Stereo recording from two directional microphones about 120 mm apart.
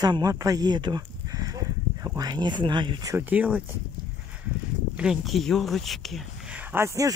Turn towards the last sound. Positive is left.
turn(degrees=-25)  # may be behind; listen again after turning